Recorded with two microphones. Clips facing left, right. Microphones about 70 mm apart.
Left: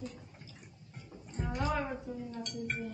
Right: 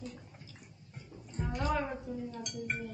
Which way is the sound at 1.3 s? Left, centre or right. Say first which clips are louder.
Right 1 dB; centre.